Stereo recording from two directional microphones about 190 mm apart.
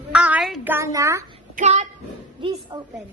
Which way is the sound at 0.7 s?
15° right (ahead or behind).